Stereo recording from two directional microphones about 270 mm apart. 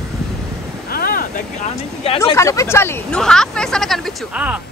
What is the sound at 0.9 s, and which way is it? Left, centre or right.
Speech, left.